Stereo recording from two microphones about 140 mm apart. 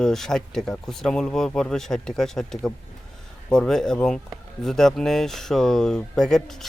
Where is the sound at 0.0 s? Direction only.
5° left (ahead or behind).